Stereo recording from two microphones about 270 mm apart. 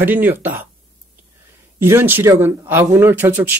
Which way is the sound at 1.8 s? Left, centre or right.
Centre.